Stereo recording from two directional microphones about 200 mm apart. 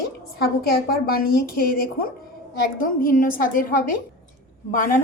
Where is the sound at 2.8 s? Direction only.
45° left (ahead or behind).